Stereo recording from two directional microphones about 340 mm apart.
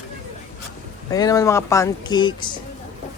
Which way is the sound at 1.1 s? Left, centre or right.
Centre.